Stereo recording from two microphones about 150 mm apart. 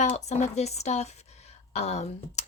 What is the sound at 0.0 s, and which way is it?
Speech, 50° left (ahead or behind).